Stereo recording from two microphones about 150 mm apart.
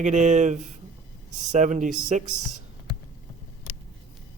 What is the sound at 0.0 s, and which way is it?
A man's voice, 55° right (ahead or behind).